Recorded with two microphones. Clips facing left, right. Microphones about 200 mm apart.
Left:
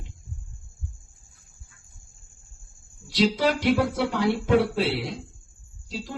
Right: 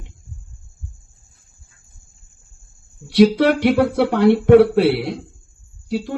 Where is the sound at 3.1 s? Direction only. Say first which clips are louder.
Right 9 dB; 60° right (ahead or behind).